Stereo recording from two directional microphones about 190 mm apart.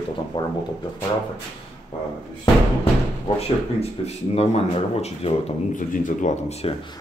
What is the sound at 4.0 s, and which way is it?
Speech, 35° left (ahead or behind).